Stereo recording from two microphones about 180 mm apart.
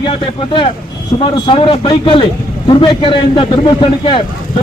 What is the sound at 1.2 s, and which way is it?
A man's voice, 30° left (ahead or behind).